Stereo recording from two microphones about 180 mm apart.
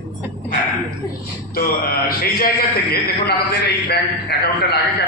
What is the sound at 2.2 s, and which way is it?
A man's voice, 55° left (ahead or behind).